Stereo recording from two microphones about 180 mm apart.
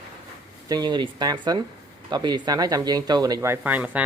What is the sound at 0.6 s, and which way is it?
Speech, 20° right (ahead or behind).